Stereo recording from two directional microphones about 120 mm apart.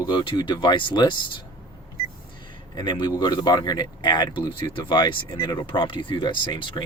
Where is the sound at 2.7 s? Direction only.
35° left (ahead or behind).